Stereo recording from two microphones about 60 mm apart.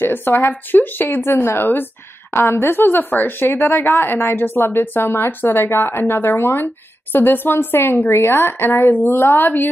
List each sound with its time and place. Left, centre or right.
0.0 s speech: left